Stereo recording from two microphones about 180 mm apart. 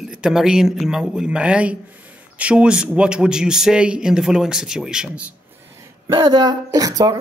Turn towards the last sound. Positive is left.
turn(degrees=-20)  # may be behind; listen again after turning